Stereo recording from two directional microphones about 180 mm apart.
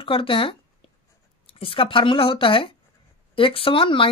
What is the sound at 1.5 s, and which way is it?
A woman's voice, 30° left (ahead or behind).